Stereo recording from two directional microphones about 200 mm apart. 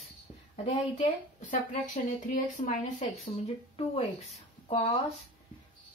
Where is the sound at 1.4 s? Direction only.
40° left (ahead or behind).